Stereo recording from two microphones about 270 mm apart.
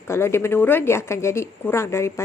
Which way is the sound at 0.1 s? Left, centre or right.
Centre.